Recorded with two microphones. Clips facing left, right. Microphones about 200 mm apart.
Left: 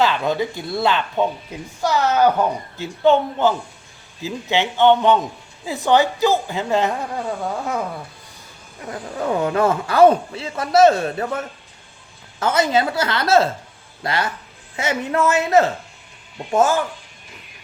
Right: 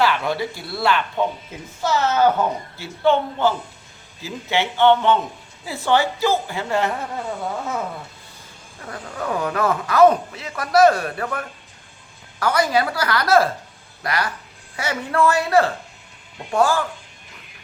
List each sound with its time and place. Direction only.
0.0 s a man's voice: 20° left (ahead or behind)
8.8 s a man's voice: 20° left (ahead or behind)